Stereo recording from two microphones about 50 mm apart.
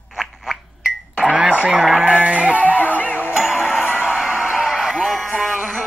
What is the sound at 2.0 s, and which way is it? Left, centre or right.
Music, right.